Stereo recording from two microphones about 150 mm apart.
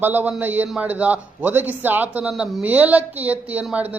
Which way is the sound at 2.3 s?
Centre (ahead or behind).